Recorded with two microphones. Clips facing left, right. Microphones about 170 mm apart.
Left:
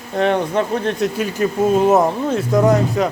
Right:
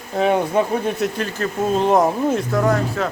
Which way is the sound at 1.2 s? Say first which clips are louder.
Left 4 dB; 10° left (ahead or behind).